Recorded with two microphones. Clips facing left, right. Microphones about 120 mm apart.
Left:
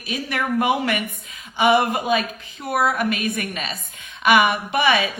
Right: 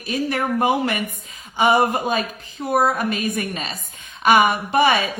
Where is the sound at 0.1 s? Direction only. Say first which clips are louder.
Right 2 dB; 40° right (ahead or behind).